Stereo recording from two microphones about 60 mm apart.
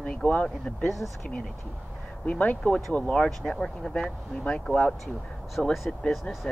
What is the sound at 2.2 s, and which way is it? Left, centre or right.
Speech, left.